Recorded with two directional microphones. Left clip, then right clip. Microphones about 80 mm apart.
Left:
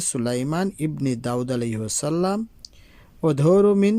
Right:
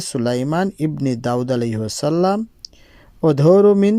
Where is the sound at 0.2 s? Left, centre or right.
Right.